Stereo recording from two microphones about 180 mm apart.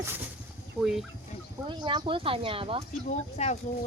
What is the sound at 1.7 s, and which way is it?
Speech, 25° right (ahead or behind).